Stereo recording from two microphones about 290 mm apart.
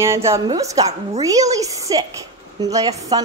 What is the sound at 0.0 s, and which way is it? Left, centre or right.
A woman's voice, centre.